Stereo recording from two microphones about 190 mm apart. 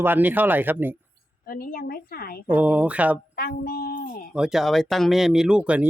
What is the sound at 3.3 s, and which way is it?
Speech, 50° left (ahead or behind).